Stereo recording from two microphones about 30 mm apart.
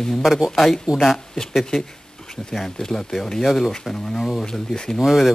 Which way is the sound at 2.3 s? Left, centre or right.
Centre.